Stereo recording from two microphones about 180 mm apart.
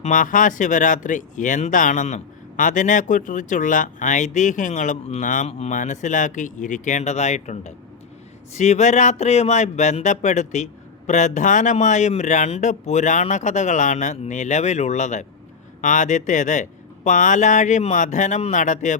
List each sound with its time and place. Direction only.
0.0 s speech: 45° left (ahead or behind)